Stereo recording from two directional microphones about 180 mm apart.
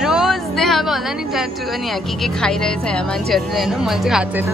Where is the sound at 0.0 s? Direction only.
Centre (ahead or behind).